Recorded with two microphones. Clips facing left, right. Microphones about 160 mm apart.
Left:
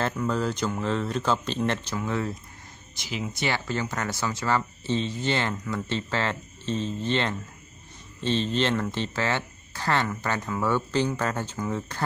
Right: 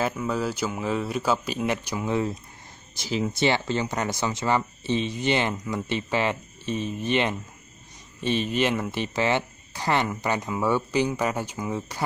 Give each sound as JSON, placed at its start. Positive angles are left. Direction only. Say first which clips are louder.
{"t": 0.0, "sound": "speech", "louder": "even", "side_deg": -5}
{"t": 3.0, "sound": "speech", "louder": "right 6 dB", "side_deg": -35}